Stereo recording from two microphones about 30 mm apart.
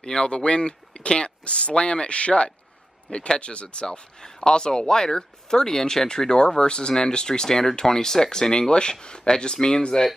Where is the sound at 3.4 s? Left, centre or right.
Left; by 8.5 s centre.